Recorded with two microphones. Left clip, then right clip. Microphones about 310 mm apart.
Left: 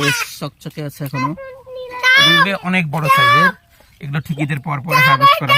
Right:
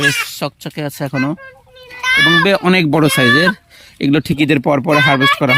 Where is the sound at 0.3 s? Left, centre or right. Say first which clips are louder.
Right 6 dB; centre.